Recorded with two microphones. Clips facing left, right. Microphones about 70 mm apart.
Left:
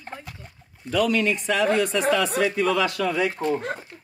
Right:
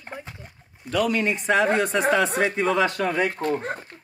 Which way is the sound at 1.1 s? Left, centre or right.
Right.